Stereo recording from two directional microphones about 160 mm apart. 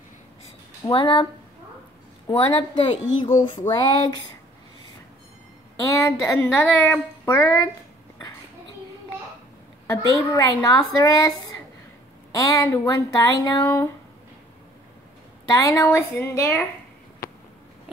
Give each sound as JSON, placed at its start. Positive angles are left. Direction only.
{"t": 0.8, "sound": "a woman's voice", "side_deg": 30}
{"t": 2.2, "sound": "a woman's voice", "side_deg": 30}
{"t": 5.8, "sound": "a woman's voice", "side_deg": 20}
{"t": 9.8, "sound": "a woman's voice", "side_deg": 20}
{"t": 12.3, "sound": "a woman's voice", "side_deg": 20}
{"t": 15.5, "sound": "a woman's voice", "side_deg": 20}
{"t": 17.9, "sound": "a sound", "side_deg": -5}